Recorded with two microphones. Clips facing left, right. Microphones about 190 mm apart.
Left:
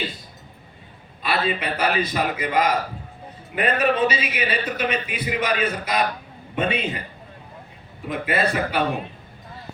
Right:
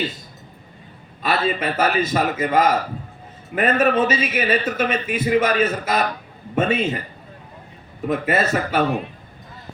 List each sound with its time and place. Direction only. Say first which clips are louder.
1.2 s speech: right 3 dB; 45° right (ahead or behind)
8.0 s speech: right 3 dB; 45° right (ahead or behind)